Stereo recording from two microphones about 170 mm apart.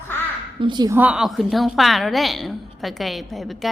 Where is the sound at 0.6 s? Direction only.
25° right (ahead or behind).